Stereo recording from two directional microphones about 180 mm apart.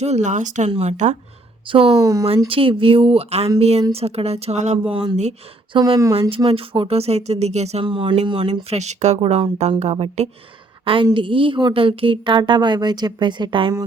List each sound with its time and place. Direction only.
0.0 s a woman's voice: 40° right (ahead or behind)
2.0 s speech: 20° right (ahead or behind)
2.5 s a woman's voice: 30° right (ahead or behind)